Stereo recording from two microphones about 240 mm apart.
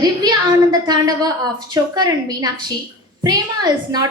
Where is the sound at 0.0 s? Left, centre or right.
Centre.